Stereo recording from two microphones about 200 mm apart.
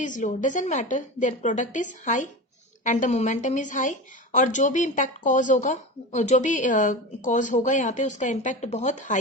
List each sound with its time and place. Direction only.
0.0 s a woman's voice: 40° left (ahead or behind)